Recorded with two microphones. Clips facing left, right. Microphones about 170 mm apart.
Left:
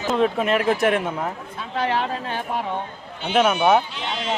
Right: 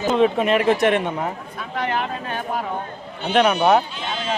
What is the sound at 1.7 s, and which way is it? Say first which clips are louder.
Speech: left 1 dB; 30° left (ahead or behind).